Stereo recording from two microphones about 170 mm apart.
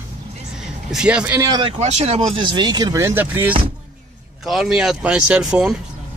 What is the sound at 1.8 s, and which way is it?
Speech, 40° right (ahead or behind).